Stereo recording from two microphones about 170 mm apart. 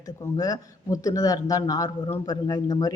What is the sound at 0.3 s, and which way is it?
Speech, 20° left (ahead or behind).